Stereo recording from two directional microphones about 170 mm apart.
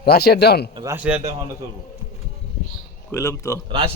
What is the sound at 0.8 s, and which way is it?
Speech, 15° right (ahead or behind).